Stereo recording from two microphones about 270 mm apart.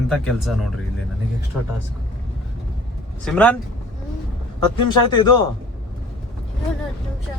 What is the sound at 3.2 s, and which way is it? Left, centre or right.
Speech, centre.